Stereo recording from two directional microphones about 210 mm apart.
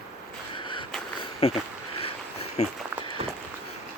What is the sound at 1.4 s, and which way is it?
Speech, 25° left (ahead or behind).